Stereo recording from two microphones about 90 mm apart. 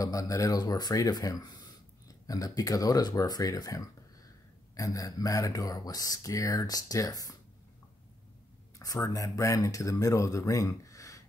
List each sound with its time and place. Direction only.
0.0 s speech: 40° left (ahead or behind)
8.7 s speech: 40° left (ahead or behind)